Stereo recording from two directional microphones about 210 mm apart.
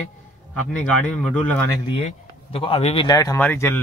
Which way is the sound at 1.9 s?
25° left (ahead or behind).